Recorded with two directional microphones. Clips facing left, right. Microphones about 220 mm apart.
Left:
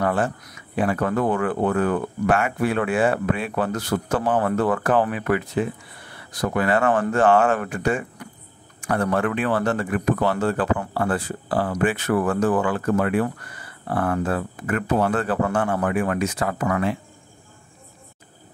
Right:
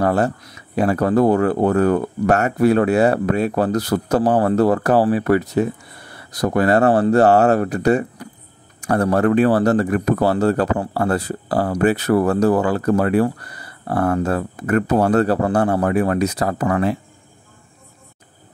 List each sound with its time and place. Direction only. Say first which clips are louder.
0.0 s speech: right 5 dB; 35° right (ahead or behind)